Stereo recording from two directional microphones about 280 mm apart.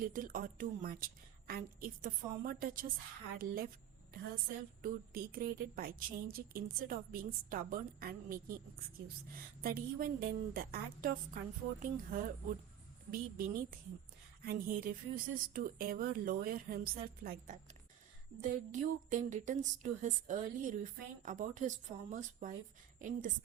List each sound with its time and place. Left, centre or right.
0.0 s a woman's voice: right
4.8 s a woman's voice: right